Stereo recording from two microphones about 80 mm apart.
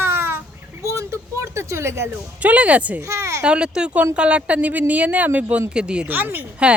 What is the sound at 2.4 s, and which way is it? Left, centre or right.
Speech, centre.